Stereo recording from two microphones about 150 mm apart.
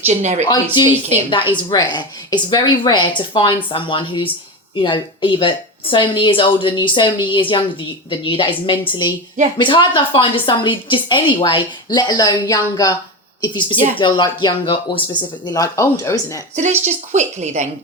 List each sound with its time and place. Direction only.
0.0 s a woman's voice: 50° right (ahead or behind)
0.4 s a woman's voice: 30° left (ahead or behind)
15.4 s speech: 20° left (ahead or behind)
16.8 s a woman's voice: 50° right (ahead or behind)